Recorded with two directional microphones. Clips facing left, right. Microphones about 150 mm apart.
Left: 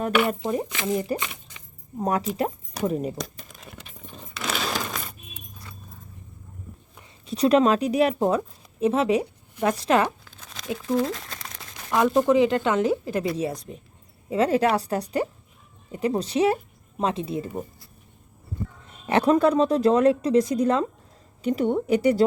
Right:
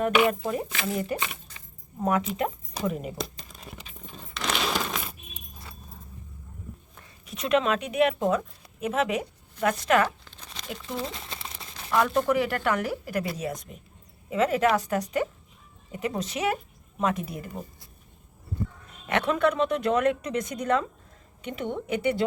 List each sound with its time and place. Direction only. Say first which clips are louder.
0.3 s speech: left 3 dB; 20° left (ahead or behind)
2.0 s speech: left 1 dB; 35° left (ahead or behind)
4.2 s a sound: even; 5° left (ahead or behind)
7.3 s speech: left 6 dB; 35° left (ahead or behind)
10.0 s crumpling: left 1 dB; 5° left (ahead or behind)
11.9 s speech: left 4 dB; 20° left (ahead or behind)
18.9 s speech: left 7 dB; 30° left (ahead or behind)